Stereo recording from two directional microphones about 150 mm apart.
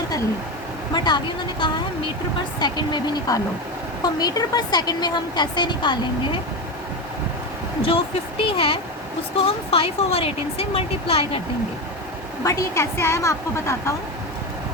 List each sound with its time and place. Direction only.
0.9 s a woman's voice: 30° left (ahead or behind)
7.8 s speech: 35° left (ahead or behind)
12.5 s a woman's voice: 20° left (ahead or behind)